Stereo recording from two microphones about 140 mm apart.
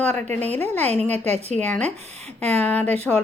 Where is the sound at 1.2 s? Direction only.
50° right (ahead or behind).